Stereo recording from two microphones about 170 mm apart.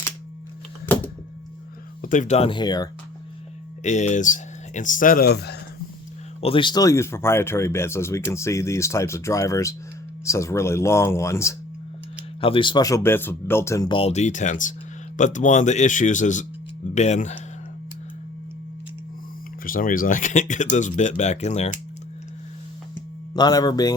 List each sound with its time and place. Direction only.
2.0 s speech: 50° left (ahead or behind); by 2.9 s 25° left (ahead or behind)
3.8 s speech: 45° left (ahead or behind); by 5.5 s 70° left (ahead or behind)
6.4 s speech: 30° left (ahead or behind)
12.4 s speech: 30° left (ahead or behind); by 13.8 s 15° left (ahead or behind)
13.8 s speech: 30° left (ahead or behind)
19.6 s speech: 55° left (ahead or behind)
23.3 s speech: 25° left (ahead or behind)